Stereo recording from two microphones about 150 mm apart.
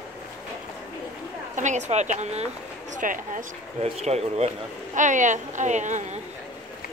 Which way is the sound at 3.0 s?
60° right (ahead or behind).